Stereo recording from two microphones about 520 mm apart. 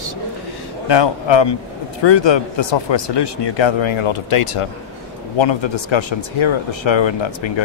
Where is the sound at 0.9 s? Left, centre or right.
Left.